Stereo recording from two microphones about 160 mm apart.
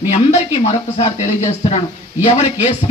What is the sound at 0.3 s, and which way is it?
Speech, 40° left (ahead or behind).